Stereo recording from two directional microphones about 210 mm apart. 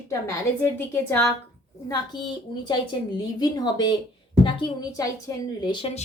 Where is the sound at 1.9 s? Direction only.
20° left (ahead or behind).